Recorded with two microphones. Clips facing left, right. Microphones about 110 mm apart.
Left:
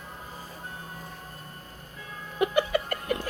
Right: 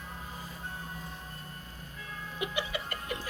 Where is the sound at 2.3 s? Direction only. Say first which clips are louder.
Left 11 dB; 50° left (ahead or behind).